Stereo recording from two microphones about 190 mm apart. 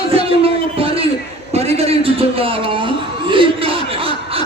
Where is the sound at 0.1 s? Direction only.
30° right (ahead or behind).